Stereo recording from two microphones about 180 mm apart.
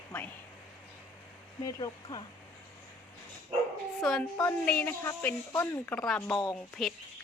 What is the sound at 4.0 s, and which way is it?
Speech, centre (ahead or behind).